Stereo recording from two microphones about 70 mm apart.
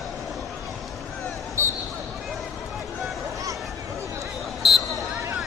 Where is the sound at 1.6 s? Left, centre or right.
Right.